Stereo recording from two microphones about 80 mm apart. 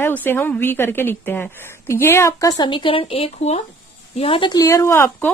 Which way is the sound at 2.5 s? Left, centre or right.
Left.